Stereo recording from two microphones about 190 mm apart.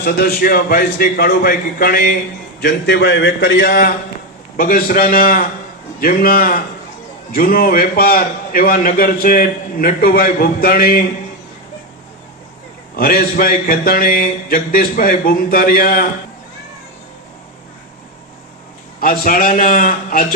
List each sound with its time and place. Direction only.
0.0 s a man's voice: 55° left (ahead or behind)
13.0 s a man's voice: 50° left (ahead or behind)
18.9 s a man's voice: 50° left (ahead or behind)